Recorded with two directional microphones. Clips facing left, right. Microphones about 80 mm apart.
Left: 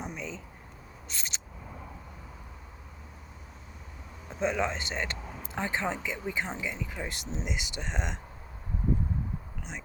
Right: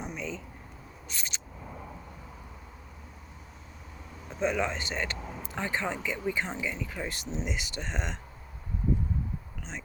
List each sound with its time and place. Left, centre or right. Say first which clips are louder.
0.1 s a sound: right 2 dB; left
4.4 s speech: even; left
5.1 s vehicle: right 2 dB; centre
5.5 s speech: left 1 dB; left